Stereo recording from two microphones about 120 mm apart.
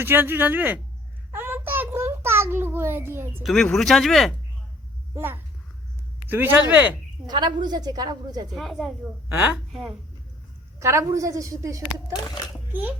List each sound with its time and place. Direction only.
0.0 s speech: 15° right (ahead or behind)
1.3 s child singing: 15° right (ahead or behind)
3.4 s speech: centre (ahead or behind)
5.1 s a woman's voice: 20° right (ahead or behind)
7.3 s a woman's voice: 40° right (ahead or behind)
8.5 s speech: centre (ahead or behind)
9.3 s speech: 15° right (ahead or behind)
10.8 s a woman's voice: 25° right (ahead or behind)